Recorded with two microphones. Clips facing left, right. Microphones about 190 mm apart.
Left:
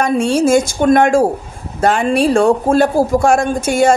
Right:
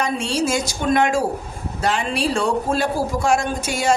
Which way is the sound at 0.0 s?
50° left (ahead or behind).